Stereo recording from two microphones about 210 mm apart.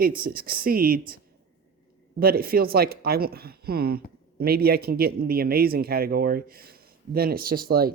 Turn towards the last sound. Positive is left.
turn(degrees=-45)  # may be behind; listen again after turning